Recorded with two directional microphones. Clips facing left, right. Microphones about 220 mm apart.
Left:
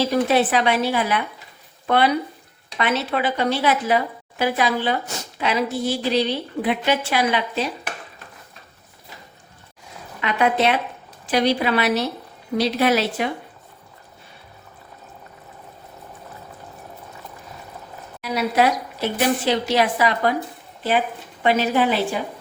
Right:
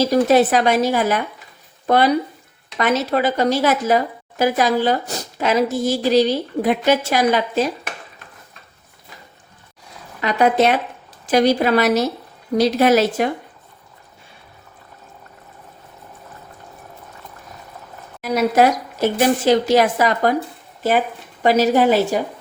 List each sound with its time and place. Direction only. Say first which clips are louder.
0.0 s a woman's voice: right 4 dB; 40° right (ahead or behind)
10.2 s a woman's voice: right 4 dB; 40° right (ahead or behind)
18.2 s speech: right 4 dB; 45° right (ahead or behind)
21.4 s a woman's voice: right 4 dB; 40° right (ahead or behind)